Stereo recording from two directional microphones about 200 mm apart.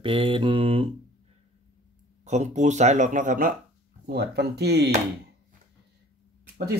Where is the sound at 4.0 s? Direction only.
55° right (ahead or behind).